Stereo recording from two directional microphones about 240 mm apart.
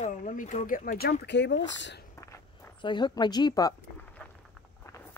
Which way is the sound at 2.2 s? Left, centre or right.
Centre.